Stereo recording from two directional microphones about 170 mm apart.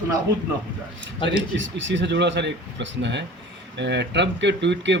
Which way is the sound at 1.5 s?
90° right.